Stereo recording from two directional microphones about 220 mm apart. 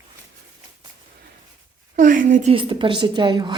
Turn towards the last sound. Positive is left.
turn(degrees=-20)  # may be behind; listen again after turning